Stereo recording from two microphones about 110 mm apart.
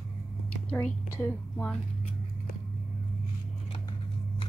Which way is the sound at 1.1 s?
25° left (ahead or behind).